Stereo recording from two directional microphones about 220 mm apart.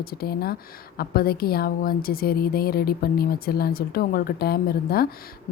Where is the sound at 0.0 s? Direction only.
45° left (ahead or behind).